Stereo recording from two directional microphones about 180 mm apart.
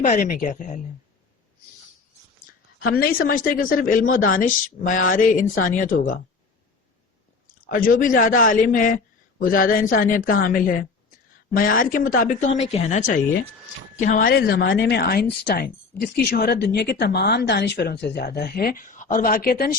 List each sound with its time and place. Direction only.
0.0 s a woman's voice: 45° left (ahead or behind)
2.8 s a woman's voice: 60° left (ahead or behind)
7.7 s a woman's voice: 50° left (ahead or behind)